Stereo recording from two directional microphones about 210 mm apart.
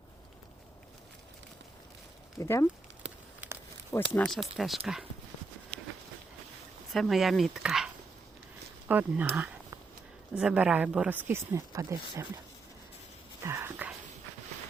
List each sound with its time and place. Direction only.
2.4 s speech: 15° left (ahead or behind)
3.4 s a sound: 10° right (ahead or behind)
4.1 s speech: 5° left (ahead or behind)
6.9 s speech: centre (ahead or behind)
8.9 s speech: 10° right (ahead or behind)
13.4 s whispering: 10° right (ahead or behind)